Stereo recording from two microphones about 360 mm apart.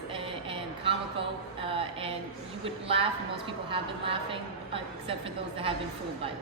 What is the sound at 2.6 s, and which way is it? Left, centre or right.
A woman's voice, centre.